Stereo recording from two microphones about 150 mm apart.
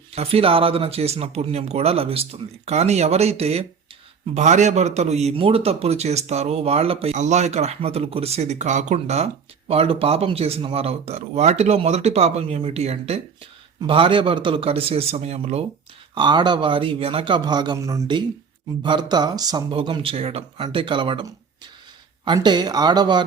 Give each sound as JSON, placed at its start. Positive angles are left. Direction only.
{"t": 0.1, "sound": "speech", "side_deg": -40}
{"t": 16.1, "sound": "speech", "side_deg": -30}
{"t": 18.8, "sound": "speech", "side_deg": -30}
{"t": 22.4, "sound": "speech", "side_deg": -25}